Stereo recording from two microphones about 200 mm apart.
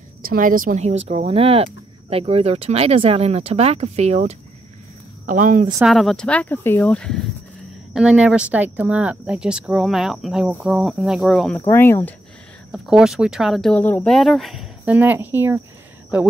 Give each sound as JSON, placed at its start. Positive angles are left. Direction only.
{"t": 0.2, "sound": "speech", "side_deg": -45}
{"t": 5.8, "sound": "speech", "side_deg": 0}
{"t": 11.6, "sound": "speech", "side_deg": 10}
{"t": 12.7, "sound": "speech", "side_deg": 0}